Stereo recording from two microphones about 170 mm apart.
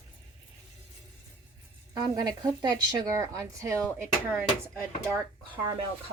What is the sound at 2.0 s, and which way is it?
A woman's voice, 20° right (ahead or behind).